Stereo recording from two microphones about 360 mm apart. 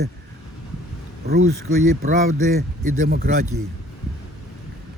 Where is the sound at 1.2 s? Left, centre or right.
Right.